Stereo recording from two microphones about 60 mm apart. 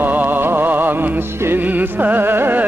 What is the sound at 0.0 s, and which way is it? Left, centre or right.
Music, right.